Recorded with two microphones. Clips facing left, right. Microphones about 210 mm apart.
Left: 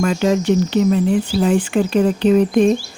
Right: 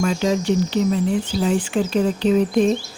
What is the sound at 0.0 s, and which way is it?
Speech, 60° left (ahead or behind).